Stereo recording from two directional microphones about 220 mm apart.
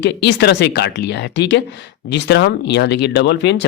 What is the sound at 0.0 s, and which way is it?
Speech, 50° left (ahead or behind).